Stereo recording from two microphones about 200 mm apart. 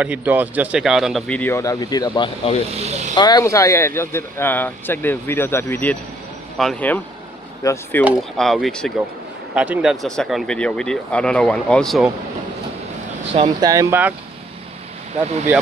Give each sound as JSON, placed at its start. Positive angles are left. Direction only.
{"t": 0.0, "sound": "speech", "side_deg": -10}
{"t": 2.7, "sound": "speech", "side_deg": -35}
{"t": 3.2, "sound": "speech", "side_deg": 20}
{"t": 8.0, "sound": "speech", "side_deg": 0}
{"t": 13.3, "sound": "speech", "side_deg": -20}